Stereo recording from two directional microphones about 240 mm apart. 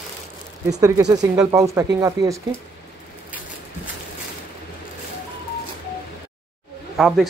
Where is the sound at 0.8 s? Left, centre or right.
Centre.